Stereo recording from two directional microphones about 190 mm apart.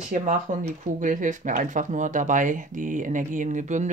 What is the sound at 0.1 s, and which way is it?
Speech, 40° right (ahead or behind).